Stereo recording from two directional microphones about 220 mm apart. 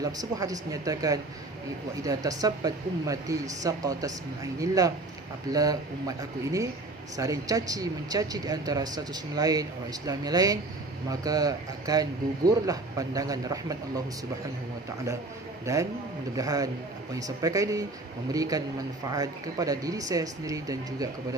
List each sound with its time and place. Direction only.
0.0 s speech: 15° right (ahead or behind)
15.6 s speech: 15° right (ahead or behind)